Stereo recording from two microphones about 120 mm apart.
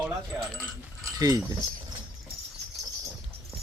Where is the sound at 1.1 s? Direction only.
30° right (ahead or behind).